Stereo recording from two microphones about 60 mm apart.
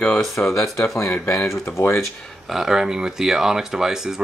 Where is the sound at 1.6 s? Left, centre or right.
Left.